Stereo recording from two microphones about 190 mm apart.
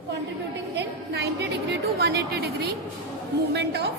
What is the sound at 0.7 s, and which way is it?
A woman's voice, 60° right (ahead or behind).